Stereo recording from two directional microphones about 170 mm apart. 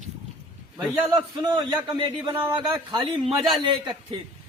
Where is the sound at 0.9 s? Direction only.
Centre (ahead or behind).